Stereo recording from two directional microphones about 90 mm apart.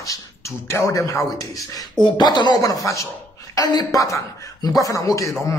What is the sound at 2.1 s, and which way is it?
Speech, 55° left (ahead or behind).